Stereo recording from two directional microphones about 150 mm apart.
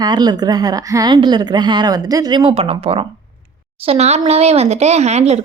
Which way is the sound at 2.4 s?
40° right (ahead or behind).